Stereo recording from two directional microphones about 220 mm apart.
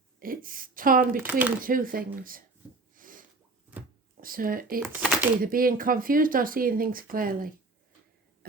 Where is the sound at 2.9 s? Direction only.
35° right (ahead or behind).